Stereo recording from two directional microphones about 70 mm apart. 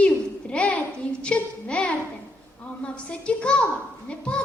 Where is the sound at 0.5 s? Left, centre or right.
Centre.